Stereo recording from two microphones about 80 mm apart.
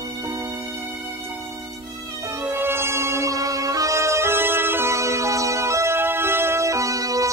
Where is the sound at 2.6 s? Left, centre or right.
Right.